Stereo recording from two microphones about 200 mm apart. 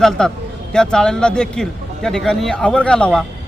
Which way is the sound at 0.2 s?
5° left (ahead or behind).